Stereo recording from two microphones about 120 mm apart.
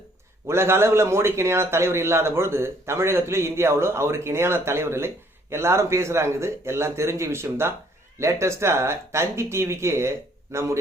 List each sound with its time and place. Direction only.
0.4 s speech: 20° right (ahead or behind)